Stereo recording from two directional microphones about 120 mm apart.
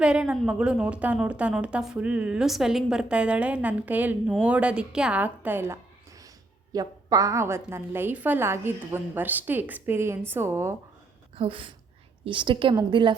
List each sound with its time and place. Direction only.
0.0 s a woman's voice: 10° right (ahead or behind)
6.7 s a woman's voice: 30° right (ahead or behind)
11.3 s a woman's voice: 45° right (ahead or behind)